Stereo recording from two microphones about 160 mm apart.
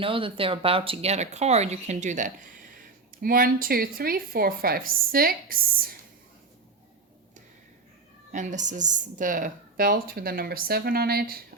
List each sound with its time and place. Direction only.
0.0 s speech: 35° right (ahead or behind); by 2.5 s 50° right (ahead or behind)
3.2 s speech: 65° right (ahead or behind)
8.3 s speech: 50° right (ahead or behind); by 11.4 s 70° right (ahead or behind)